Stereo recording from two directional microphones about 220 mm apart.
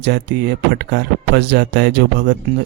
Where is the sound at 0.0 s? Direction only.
50° right (ahead or behind).